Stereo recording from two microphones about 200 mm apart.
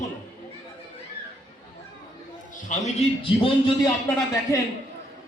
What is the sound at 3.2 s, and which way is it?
Speech, 25° left (ahead or behind).